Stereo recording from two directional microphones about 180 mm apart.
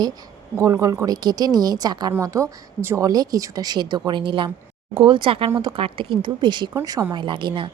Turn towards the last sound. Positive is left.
turn(degrees=-25)  # may be behind; listen again after turning